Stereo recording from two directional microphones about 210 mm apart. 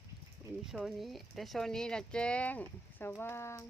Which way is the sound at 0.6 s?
Centre (ahead or behind).